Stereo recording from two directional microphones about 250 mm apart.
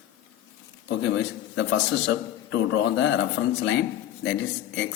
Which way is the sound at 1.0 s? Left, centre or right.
Left.